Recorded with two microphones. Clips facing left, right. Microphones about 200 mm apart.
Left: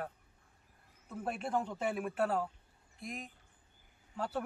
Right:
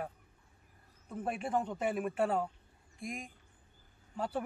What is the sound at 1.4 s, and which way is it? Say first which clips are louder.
Speech: right 1 dB; 5° left (ahead or behind).